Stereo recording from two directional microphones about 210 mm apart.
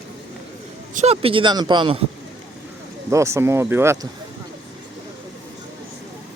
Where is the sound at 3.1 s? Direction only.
15° right (ahead or behind).